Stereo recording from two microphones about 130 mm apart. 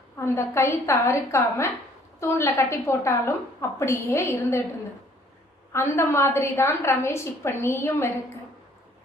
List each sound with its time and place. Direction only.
0.2 s a woman's voice: 20° left (ahead or behind)
5.7 s a woman's voice: 20° left (ahead or behind)